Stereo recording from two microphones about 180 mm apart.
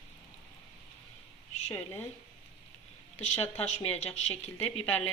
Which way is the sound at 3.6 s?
40° left (ahead or behind).